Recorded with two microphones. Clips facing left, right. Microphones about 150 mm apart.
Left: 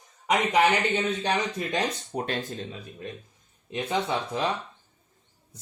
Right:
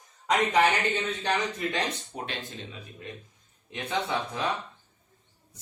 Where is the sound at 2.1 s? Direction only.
40° left (ahead or behind).